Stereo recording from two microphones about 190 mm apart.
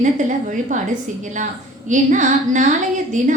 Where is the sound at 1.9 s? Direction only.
40° right (ahead or behind).